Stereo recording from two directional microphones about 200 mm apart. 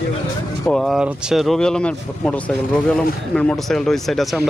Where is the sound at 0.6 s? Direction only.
Centre (ahead or behind).